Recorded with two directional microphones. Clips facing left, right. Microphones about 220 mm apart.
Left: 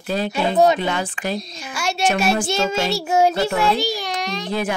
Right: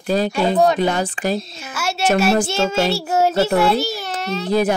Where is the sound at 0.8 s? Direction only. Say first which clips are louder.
Right 4 dB; 40° right (ahead or behind).